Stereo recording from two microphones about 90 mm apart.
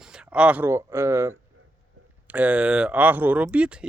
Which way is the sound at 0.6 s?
30° right (ahead or behind).